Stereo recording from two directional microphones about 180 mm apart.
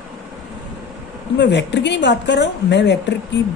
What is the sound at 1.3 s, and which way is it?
A woman's voice, 75° left (ahead or behind).